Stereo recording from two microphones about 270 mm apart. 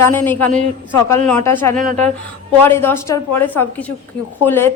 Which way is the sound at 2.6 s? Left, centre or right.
Centre.